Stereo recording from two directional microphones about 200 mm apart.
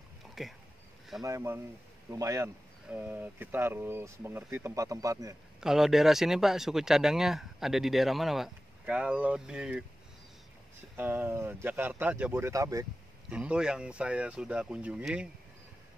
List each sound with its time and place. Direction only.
0.3 s a sound: centre (ahead or behind)
1.2 s speech: 15° right (ahead or behind)
5.6 s speech: centre (ahead or behind)
11.0 s speech: 10° right (ahead or behind)
13.3 s speech: 5° right (ahead or behind)